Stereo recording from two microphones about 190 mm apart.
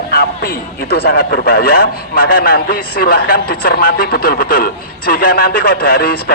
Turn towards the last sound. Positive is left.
turn(degrees=50)  # may be behind; listen again after turning